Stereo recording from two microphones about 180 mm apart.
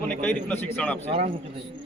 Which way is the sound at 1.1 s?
30° right (ahead or behind).